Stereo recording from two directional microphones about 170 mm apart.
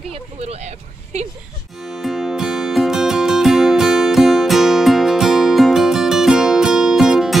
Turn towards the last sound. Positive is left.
turn(degrees=0)  # may be behind; listen again after turning